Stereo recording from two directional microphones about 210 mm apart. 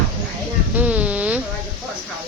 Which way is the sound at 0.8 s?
5° right (ahead or behind).